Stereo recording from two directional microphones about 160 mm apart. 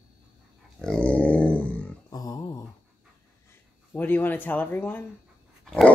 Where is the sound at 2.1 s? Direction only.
20° left (ahead or behind).